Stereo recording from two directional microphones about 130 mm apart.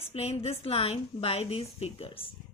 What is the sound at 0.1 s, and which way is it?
A woman's voice, 50° left (ahead or behind).